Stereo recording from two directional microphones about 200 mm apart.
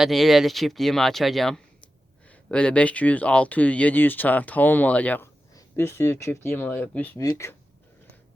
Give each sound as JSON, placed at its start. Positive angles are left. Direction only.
{"t": 0.0, "sound": "speech", "side_deg": 0}